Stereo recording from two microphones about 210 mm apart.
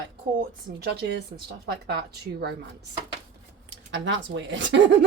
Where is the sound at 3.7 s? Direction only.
60° right (ahead or behind).